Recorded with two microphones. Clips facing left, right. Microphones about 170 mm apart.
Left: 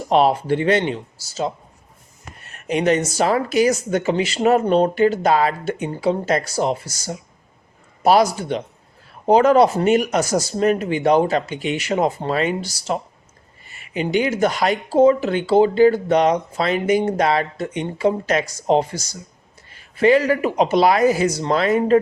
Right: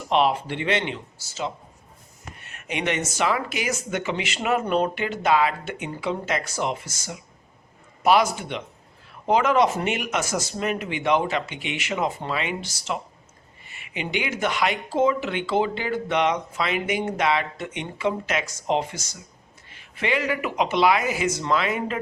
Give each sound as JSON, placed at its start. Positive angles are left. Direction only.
{"t": 0.1, "sound": "speech", "side_deg": 40}